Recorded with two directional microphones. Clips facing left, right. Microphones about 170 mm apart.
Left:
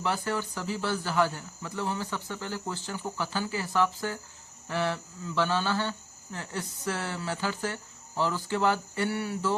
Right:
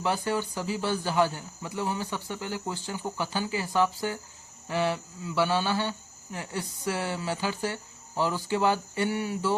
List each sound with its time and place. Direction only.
0.0 s speech: 15° right (ahead or behind)